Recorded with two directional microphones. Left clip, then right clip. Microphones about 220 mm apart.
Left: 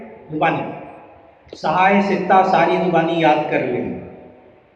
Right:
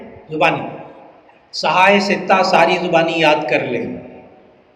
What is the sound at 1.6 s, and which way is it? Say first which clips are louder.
A man's voice: right 3 dB; 40° right (ahead or behind).